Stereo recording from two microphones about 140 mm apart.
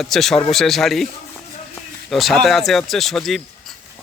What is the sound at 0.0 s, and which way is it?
Speech, centre (ahead or behind).